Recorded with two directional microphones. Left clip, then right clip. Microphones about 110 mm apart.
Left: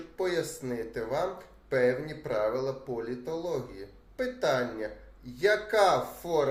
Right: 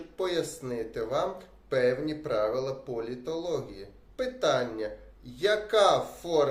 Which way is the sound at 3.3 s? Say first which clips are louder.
Right 2 dB; 45° left (ahead or behind).